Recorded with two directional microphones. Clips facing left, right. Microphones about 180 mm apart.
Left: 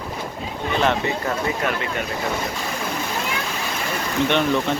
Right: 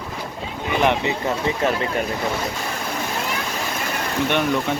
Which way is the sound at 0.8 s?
20° right (ahead or behind).